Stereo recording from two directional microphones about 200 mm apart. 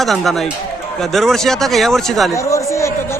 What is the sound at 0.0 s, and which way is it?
Speech, centre (ahead or behind).